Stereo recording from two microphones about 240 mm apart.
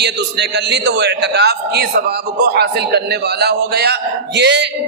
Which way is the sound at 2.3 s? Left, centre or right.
Right.